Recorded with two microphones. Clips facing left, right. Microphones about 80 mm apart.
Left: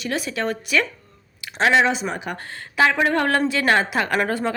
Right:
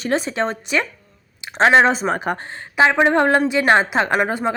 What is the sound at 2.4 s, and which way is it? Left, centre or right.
Speech, right.